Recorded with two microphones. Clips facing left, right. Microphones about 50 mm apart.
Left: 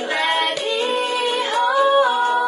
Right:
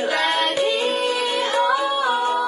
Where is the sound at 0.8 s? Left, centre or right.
Left.